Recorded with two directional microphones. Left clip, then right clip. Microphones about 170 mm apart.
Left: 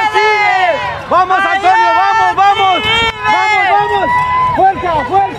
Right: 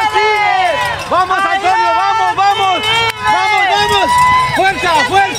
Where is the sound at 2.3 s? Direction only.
50° left (ahead or behind).